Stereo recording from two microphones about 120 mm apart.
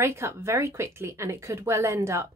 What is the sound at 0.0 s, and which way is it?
Speech, 20° right (ahead or behind).